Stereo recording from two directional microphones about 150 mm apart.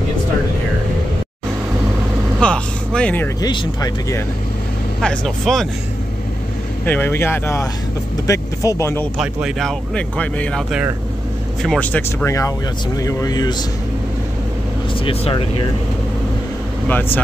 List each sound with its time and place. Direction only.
2.4 s vehicle: 5° left (ahead or behind)
3.3 s speech: 25° left (ahead or behind)
5.0 s speech: 5° left (ahead or behind)
6.9 s speech: 15° left (ahead or behind)
9.2 s speech: centre (ahead or behind)
11.6 s speech: 5° left (ahead or behind); by 13.6 s 25° left (ahead or behind)
15.0 s speech: 35° left (ahead or behind)
16.8 s speech: 10° left (ahead or behind)